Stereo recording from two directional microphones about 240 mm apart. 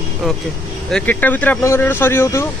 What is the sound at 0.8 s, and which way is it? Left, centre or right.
Speech, centre.